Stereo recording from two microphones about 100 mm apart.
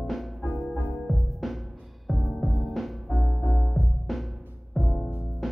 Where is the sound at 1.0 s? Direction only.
Centre (ahead or behind).